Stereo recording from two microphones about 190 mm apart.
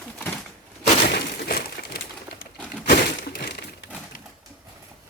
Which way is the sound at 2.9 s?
55° left (ahead or behind).